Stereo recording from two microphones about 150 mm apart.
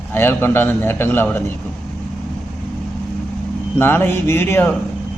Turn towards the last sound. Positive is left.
turn(degrees=15)  # may be behind; listen again after turning